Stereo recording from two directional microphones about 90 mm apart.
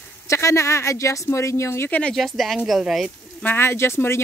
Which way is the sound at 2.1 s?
Centre (ahead or behind).